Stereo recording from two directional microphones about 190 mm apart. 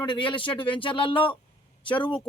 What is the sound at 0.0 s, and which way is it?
Speech, 25° left (ahead or behind).